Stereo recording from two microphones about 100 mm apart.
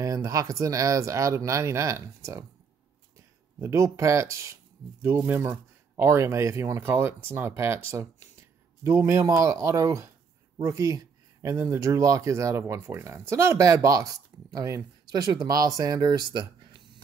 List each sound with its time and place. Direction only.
0.0 s speech: 35° right (ahead or behind)